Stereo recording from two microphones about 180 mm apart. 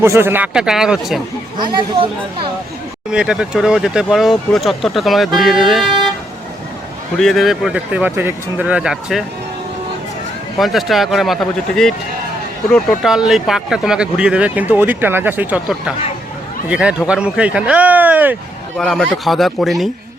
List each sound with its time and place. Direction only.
0.0 s speech: 15° right (ahead or behind)
1.5 s speech: 25° right (ahead or behind)
3.1 s speech: 5° right (ahead or behind)
7.2 s speech: centre (ahead or behind)
10.6 s speech: centre (ahead or behind)
18.8 s speech: centre (ahead or behind)